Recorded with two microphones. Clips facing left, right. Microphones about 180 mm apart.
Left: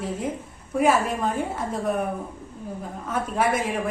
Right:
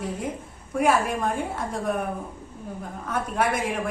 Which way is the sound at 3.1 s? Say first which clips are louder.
Left 1 dB; 5° left (ahead or behind).